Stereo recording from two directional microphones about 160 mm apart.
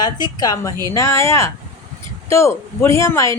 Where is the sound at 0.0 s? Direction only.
25° left (ahead or behind).